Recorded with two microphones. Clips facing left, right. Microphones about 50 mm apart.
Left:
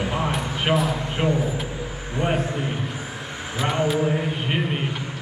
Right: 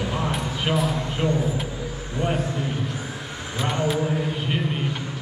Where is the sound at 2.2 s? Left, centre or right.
Left.